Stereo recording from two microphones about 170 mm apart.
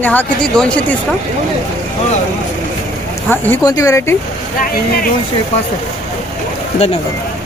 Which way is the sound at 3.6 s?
20° left (ahead or behind).